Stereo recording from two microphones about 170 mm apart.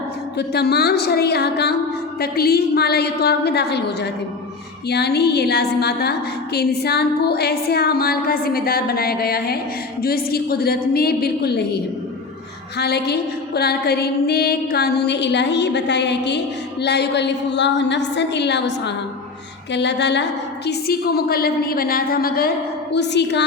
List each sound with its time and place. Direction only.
0.3 s a woman's voice: 70° left (ahead or behind); by 20.2 s 90° left
20.7 s a woman's voice: 65° left (ahead or behind)
23.0 s a woman's voice: 90° left